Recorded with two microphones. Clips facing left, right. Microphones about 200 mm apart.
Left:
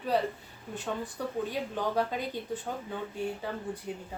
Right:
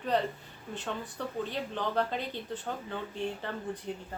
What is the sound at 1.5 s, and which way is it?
Speech, 10° left (ahead or behind).